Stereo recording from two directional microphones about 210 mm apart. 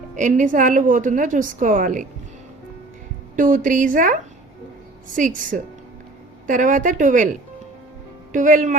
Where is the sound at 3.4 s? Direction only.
40° right (ahead or behind).